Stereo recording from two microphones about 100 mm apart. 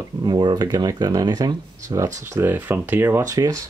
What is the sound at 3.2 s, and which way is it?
Speech, 35° right (ahead or behind).